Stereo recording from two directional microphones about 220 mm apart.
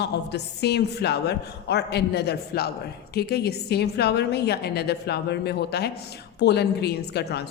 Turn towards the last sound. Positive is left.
turn(degrees=50)  # may be behind; listen again after turning